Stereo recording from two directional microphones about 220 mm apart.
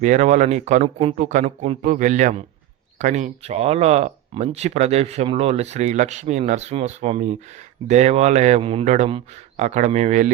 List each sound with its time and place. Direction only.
0.0 s speech: 35° right (ahead or behind)